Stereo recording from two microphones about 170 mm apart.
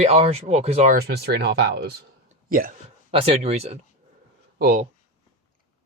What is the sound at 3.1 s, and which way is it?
Speech, 35° right (ahead or behind).